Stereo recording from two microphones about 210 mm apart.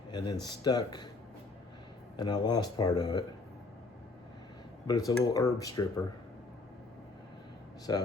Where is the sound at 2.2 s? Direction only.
20° left (ahead or behind).